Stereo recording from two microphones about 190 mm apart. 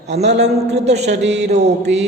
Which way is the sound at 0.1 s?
35° right (ahead or behind).